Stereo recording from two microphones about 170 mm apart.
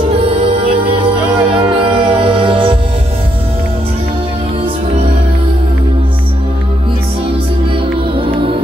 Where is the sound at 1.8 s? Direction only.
30° right (ahead or behind).